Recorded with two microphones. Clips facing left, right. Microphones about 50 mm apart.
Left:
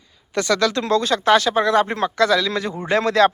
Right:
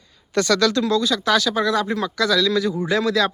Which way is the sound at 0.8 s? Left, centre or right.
Left.